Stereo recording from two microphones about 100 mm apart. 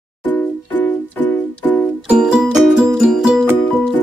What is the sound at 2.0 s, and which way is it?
Music, 10° right (ahead or behind).